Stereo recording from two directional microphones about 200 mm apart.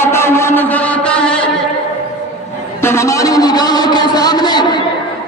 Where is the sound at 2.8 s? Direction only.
15° left (ahead or behind).